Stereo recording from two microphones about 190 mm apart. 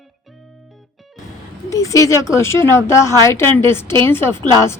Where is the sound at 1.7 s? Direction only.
15° left (ahead or behind).